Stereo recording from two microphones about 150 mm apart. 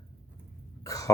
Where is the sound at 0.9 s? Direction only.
20° left (ahead or behind).